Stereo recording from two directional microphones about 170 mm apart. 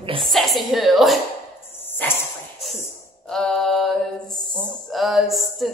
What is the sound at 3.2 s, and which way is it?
Mantra, 5° left (ahead or behind).